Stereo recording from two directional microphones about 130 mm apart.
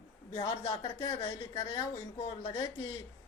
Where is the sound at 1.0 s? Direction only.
20° left (ahead or behind).